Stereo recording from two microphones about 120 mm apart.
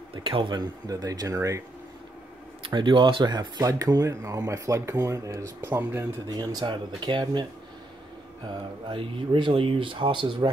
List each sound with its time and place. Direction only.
0.1 s speech: 45° right (ahead or behind); by 1.6 s 25° right (ahead or behind)
2.6 s speech: 45° right (ahead or behind); by 6.0 s 20° right (ahead or behind)
6.2 s speech: 35° right (ahead or behind)
8.8 s speech: 45° right (ahead or behind)